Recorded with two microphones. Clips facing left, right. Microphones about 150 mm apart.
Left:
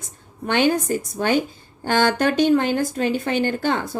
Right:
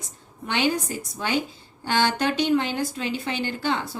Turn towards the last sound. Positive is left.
turn(degrees=50)  # may be behind; listen again after turning